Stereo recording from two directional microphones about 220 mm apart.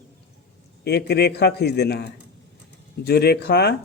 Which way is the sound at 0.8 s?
45° left (ahead or behind).